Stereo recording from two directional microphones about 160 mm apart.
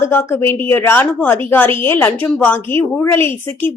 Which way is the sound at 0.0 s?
15° left (ahead or behind).